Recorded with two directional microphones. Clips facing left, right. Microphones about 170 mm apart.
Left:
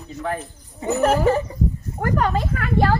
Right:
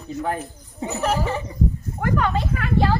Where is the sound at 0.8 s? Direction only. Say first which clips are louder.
Left 6 dB; 50° left (ahead or behind).